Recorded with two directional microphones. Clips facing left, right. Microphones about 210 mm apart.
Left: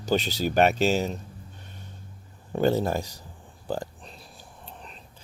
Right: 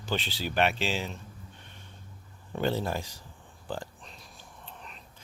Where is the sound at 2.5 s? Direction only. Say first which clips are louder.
Left 6 dB; 40° left (ahead or behind).